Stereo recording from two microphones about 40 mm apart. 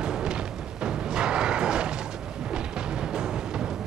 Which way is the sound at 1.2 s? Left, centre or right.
Right.